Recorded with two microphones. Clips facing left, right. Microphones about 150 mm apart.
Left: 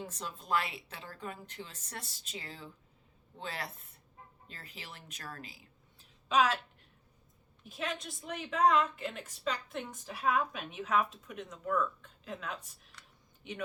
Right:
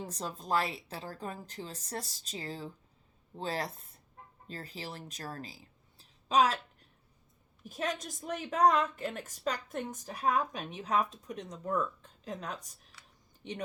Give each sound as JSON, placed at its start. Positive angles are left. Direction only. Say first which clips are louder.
{"t": 0.0, "sound": "a woman's voice", "louder": "right 3 dB", "side_deg": -35}
{"t": 6.0, "sound": "a sound", "louder": "right 2 dB", "side_deg": -35}
{"t": 7.6, "sound": "a woman's voice", "louder": "right 3 dB", "side_deg": -40}